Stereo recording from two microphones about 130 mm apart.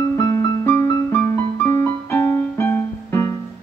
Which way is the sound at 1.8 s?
20° left (ahead or behind).